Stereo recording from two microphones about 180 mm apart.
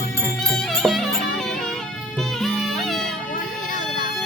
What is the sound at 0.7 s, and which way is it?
Music, centre (ahead or behind).